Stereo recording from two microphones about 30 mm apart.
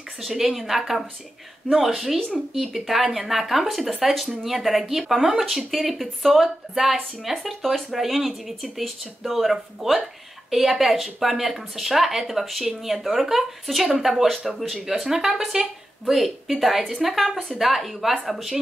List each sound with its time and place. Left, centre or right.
0.3 s speech: centre
14.9 s a woman's voice: centre
16.1 s speech: centre